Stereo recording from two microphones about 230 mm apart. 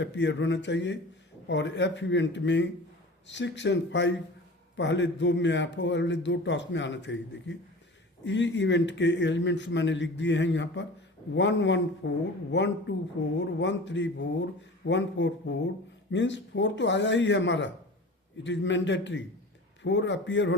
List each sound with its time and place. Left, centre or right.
0.0 s speech: left